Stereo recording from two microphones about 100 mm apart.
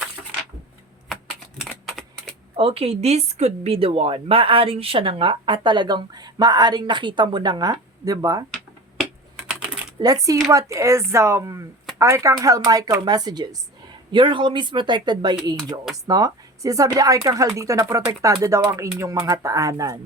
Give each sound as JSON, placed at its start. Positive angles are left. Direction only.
{"t": 1.9, "sound": "typewriter", "side_deg": 0}
{"t": 2.6, "sound": "speech", "side_deg": -70}
{"t": 9.3, "sound": "typing", "side_deg": -10}
{"t": 10.0, "sound": "speech", "side_deg": -35}
{"t": 16.0, "sound": "speech", "side_deg": -35}